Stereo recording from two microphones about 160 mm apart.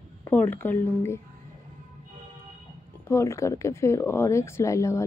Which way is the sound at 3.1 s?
15° left (ahead or behind).